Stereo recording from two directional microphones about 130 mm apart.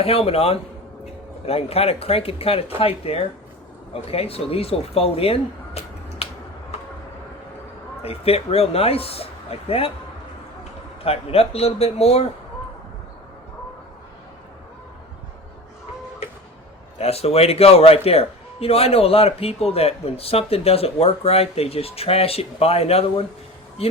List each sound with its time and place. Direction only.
0.0 s a man's voice: 50° left (ahead or behind)
8.0 s a man's voice: 50° left (ahead or behind)
17.0 s a man's voice: 50° left (ahead or behind)